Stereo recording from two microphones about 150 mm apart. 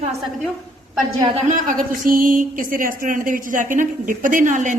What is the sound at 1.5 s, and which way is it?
A woman's voice, 60° right (ahead or behind).